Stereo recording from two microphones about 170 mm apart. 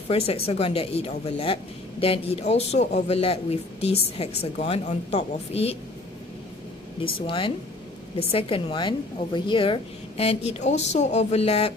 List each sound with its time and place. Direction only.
0.1 s speech: 35° left (ahead or behind)
7.0 s speech: 30° left (ahead or behind)